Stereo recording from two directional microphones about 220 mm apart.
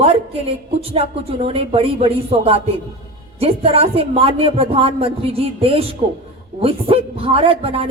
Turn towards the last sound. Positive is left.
turn(degrees=-25)  # may be behind; listen again after turning